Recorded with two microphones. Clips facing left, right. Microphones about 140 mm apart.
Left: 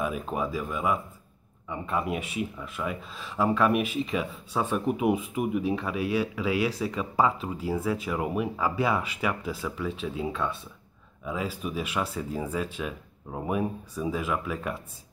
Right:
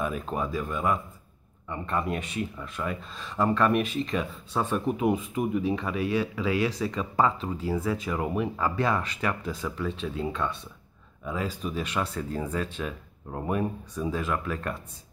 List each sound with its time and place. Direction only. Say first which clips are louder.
0.0 s speech: even; 5° left (ahead or behind)